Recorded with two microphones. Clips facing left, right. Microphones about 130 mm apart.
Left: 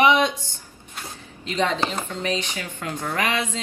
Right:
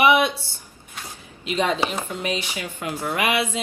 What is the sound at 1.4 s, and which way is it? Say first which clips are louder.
Speech: right 1 dB; 15° right (ahead or behind).